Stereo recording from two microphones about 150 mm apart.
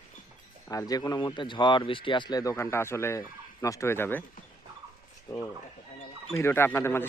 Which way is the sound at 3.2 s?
20° left (ahead or behind).